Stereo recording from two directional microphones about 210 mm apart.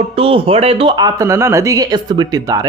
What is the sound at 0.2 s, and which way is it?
Speech, 25° right (ahead or behind).